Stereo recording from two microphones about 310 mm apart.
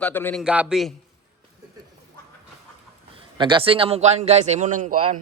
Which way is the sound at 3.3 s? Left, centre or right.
Centre.